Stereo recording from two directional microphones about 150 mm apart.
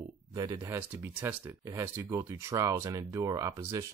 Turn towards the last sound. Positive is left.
turn(degrees=-20)  # may be behind; listen again after turning